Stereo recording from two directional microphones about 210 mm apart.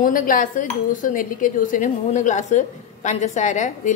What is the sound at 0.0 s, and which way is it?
Speech, 40° left (ahead or behind).